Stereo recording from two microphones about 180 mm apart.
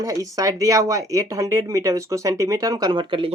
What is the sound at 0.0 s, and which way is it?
Speech, 20° right (ahead or behind).